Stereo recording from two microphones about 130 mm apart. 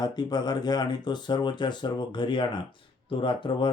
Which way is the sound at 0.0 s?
35° left (ahead or behind).